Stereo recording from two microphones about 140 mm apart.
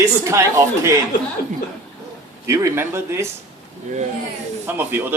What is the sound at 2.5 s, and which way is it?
Speech, 20° right (ahead or behind).